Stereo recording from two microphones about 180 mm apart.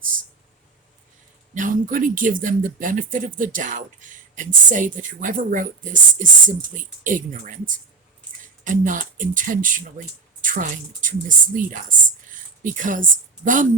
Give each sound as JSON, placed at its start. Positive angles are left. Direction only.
{"t": 1.5, "sound": "a woman's voice", "side_deg": -45}